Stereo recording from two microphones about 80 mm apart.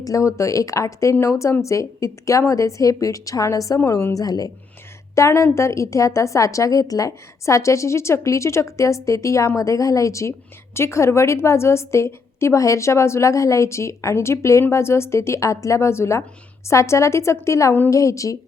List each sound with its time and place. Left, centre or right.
0.0 s a woman's voice: left
5.1 s a woman's voice: left